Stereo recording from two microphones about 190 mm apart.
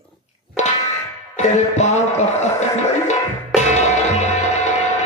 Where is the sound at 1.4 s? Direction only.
35° left (ahead or behind).